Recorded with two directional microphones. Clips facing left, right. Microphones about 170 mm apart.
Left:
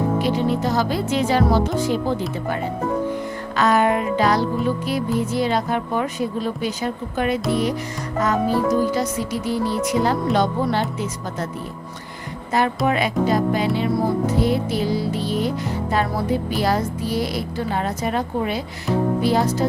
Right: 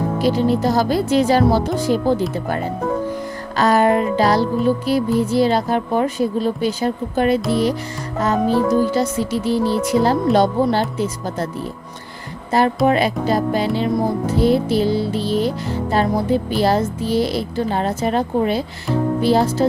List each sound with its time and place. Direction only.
0.2 s a woman's voice: 35° right (ahead or behind)
3.6 s a woman's voice: 35° right (ahead or behind)
8.5 s speech: centre (ahead or behind)
8.9 s a woman's voice: 30° right (ahead or behind)
12.5 s a woman's voice: 35° right (ahead or behind)